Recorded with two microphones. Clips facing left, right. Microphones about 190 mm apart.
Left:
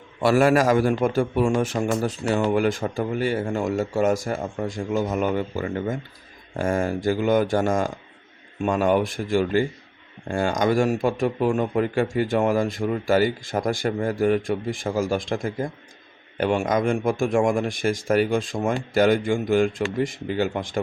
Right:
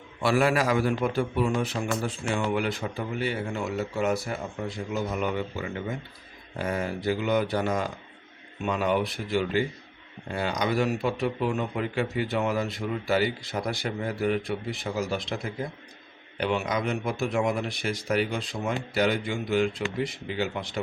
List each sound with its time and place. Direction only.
0.2 s a man's voice: 45° left (ahead or behind)